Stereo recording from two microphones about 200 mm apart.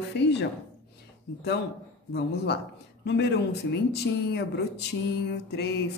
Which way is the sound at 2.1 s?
55° left (ahead or behind).